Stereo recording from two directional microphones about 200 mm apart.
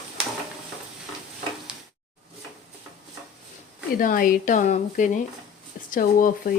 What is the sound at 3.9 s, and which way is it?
Speech, 45° left (ahead or behind).